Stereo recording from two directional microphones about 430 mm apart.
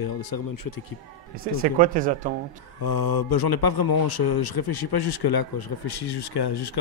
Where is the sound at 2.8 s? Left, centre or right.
Left.